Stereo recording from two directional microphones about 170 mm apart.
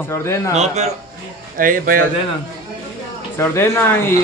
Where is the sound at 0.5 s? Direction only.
40° right (ahead or behind).